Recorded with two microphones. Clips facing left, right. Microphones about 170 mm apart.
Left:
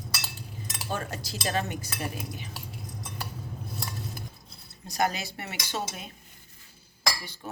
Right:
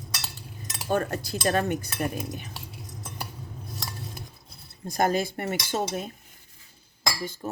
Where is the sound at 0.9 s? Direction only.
55° right (ahead or behind).